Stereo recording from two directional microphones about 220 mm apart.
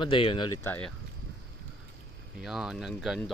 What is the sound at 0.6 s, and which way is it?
Speech, 10° left (ahead or behind).